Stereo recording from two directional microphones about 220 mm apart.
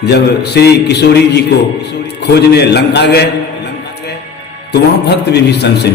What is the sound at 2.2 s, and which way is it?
Mantra, 50° left (ahead or behind).